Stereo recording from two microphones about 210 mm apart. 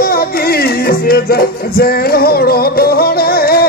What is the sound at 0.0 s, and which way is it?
Music, 45° left (ahead or behind).